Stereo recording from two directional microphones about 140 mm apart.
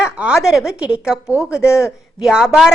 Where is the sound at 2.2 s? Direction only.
5° right (ahead or behind).